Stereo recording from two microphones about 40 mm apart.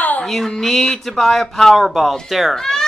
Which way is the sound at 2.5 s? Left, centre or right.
Centre.